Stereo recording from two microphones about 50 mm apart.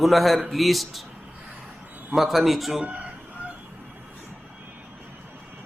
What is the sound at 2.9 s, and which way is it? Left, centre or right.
Chicken, right.